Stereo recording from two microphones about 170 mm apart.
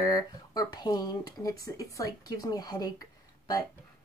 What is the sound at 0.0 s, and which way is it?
Speech, 20° left (ahead or behind).